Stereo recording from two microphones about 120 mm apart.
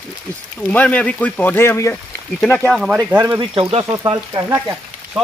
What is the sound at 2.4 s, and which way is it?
Speech, 10° left (ahead or behind).